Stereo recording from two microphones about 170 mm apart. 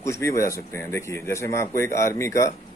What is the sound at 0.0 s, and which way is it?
A man's voice, 15° left (ahead or behind).